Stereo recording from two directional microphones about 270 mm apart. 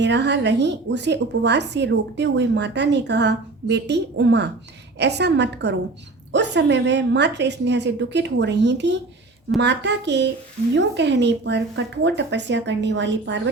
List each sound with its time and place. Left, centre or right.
0.0 s speech: right